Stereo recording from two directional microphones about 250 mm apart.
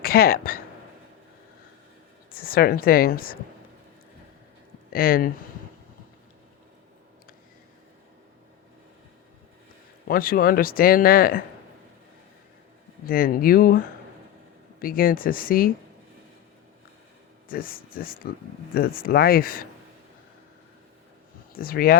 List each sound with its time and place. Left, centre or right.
0.0 s speech: left
2.3 s speech: left
4.9 s speech: left
10.1 s speech: left
13.1 s speech: left
17.5 s speech: left
21.5 s speech: left